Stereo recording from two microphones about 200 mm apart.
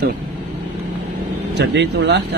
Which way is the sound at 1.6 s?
60° right (ahead or behind).